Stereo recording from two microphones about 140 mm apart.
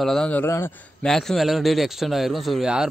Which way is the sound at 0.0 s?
5° left (ahead or behind).